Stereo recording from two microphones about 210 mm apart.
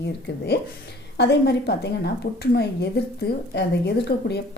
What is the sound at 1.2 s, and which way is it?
A woman's voice, 50° left (ahead or behind).